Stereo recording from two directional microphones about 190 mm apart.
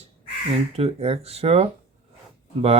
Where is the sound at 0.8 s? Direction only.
30° right (ahead or behind).